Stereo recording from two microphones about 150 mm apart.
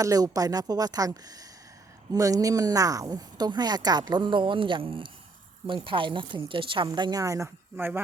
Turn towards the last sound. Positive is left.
turn(degrees=-15)  # may be behind; listen again after turning